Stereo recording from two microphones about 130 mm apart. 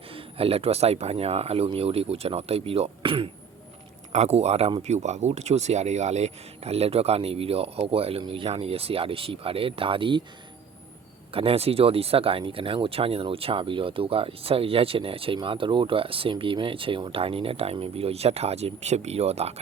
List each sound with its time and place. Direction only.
0.1 s speech: 45° right (ahead or behind)
4.1 s speech: 55° right (ahead or behind); by 10.2 s 40° right (ahead or behind)
11.3 s speech: 45° right (ahead or behind)